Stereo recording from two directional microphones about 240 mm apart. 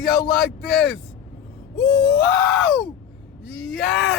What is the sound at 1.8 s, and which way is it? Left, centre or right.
Speech, left.